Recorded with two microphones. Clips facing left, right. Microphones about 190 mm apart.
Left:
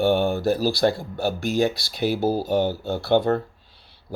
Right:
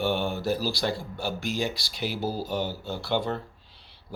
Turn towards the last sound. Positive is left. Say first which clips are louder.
# left 8 dB
turn(degrees=55)  # may be behind; listen again after turning